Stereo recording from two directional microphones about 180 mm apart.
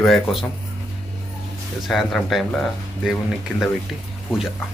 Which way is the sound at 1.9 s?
Centre (ahead or behind).